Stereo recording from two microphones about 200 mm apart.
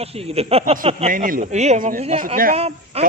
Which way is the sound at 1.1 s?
45° right (ahead or behind).